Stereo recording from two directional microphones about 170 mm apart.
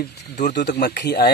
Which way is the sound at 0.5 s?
80° left.